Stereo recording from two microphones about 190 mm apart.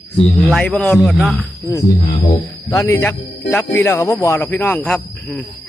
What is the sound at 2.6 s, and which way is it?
Speech, 15° left (ahead or behind).